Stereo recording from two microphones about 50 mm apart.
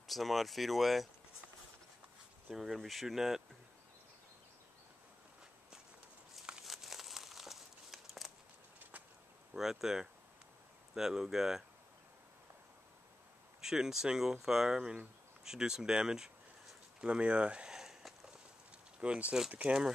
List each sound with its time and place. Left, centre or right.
0.0 s speech: centre
2.5 s speech: centre
6.6 s crumpling: centre
9.6 s speech: centre
13.6 s speech: centre
18.7 s a sound: right
19.6 s speech: centre